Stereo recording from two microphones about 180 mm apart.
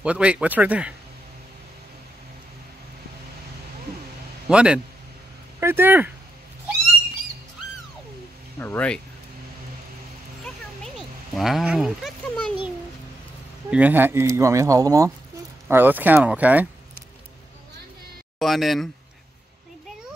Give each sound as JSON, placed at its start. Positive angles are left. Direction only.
{"t": 0.0, "sound": "speech", "side_deg": -5}
{"t": 4.5, "sound": "speech", "side_deg": -5}
{"t": 8.5, "sound": "speech", "side_deg": 10}
{"t": 10.4, "sound": "a sound", "side_deg": 0}
{"t": 13.7, "sound": "speech", "side_deg": -10}
{"t": 18.4, "sound": "speech", "side_deg": 0}